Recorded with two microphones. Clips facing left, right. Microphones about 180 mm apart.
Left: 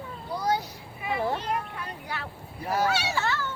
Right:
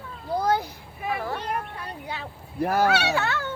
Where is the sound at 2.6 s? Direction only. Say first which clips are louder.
Right 5 dB; 65° right (ahead or behind).